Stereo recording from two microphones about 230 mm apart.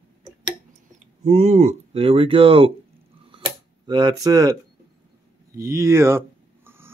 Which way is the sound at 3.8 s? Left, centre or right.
Centre.